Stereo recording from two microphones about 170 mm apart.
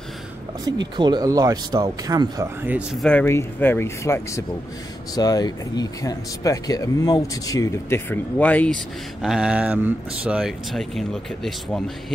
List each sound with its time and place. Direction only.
0.9 s speech: 25° right (ahead or behind); by 3.0 s 10° right (ahead or behind)
3.0 s speech: 5° left (ahead or behind)
9.2 s speech: 5° right (ahead or behind)